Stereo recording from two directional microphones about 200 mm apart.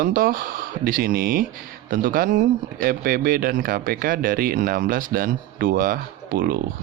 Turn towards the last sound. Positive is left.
turn(degrees=-45)  # may be behind; listen again after turning